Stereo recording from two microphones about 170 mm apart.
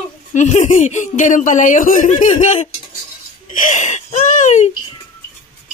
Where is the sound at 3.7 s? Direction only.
45° left (ahead or behind).